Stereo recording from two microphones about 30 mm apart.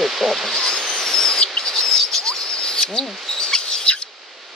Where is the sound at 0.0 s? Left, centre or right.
Centre.